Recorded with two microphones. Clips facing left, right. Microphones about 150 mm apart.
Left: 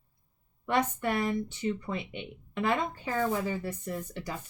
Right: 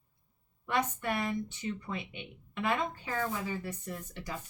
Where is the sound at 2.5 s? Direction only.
30° left (ahead or behind).